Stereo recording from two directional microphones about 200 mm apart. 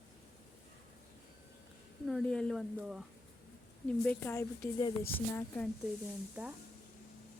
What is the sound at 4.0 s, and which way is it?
Speech, 10° left (ahead or behind).